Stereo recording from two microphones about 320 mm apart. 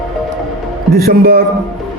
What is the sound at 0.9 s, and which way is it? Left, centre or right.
Speech, right.